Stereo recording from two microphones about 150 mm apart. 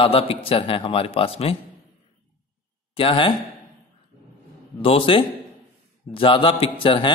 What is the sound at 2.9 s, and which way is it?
Speech, 35° left (ahead or behind).